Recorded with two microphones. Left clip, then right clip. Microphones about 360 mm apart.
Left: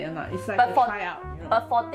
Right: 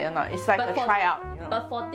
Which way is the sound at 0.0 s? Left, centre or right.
Right.